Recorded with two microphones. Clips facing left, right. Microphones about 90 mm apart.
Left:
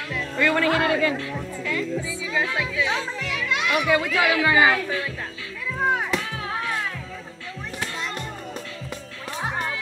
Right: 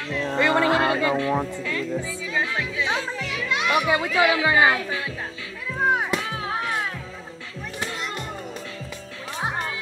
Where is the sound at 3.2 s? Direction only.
Centre (ahead or behind).